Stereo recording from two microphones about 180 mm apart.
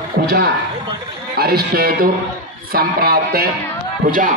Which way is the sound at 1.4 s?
55° right (ahead or behind).